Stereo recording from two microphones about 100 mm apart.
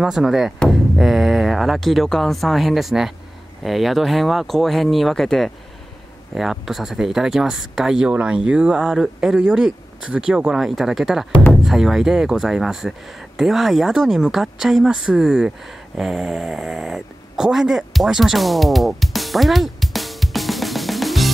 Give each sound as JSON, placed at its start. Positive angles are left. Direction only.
{"t": 0.0, "sound": "speech", "side_deg": -5}